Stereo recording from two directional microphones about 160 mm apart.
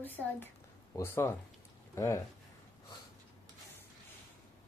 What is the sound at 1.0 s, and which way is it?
Speech, 15° left (ahead or behind).